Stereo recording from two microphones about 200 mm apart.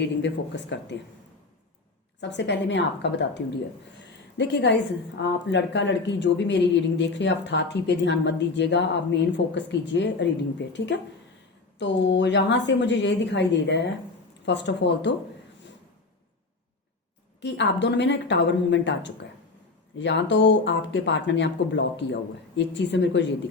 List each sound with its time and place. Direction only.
0.0 s speech: 60° left (ahead or behind)
2.2 s speech: 60° left (ahead or behind)
17.4 s speech: 60° left (ahead or behind)